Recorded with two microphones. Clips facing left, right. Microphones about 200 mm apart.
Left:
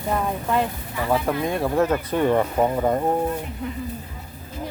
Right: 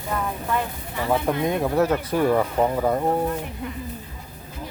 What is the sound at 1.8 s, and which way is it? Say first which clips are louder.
Speech: left 1 dB; 10° right (ahead or behind).